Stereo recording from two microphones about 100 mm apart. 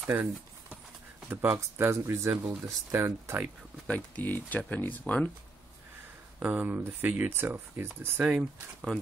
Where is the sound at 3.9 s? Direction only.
15° left (ahead or behind).